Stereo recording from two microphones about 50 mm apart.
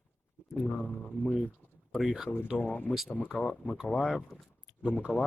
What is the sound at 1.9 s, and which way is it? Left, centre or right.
Speech, centre.